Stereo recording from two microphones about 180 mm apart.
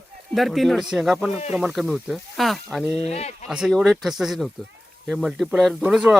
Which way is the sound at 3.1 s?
35° left (ahead or behind).